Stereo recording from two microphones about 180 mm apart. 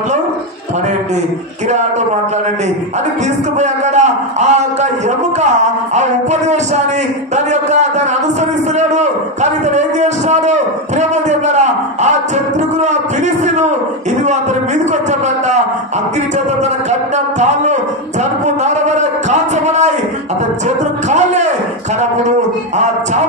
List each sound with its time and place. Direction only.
3.5 s a man's voice: 40° right (ahead or behind)
5.9 s a man's voice: 40° right (ahead or behind)
15.0 s a man's voice: 40° right (ahead or behind)
17.4 s a man's voice: 40° right (ahead or behind)
18.6 s a sound: 40° right (ahead or behind)
21.1 s a sound: 40° right (ahead or behind)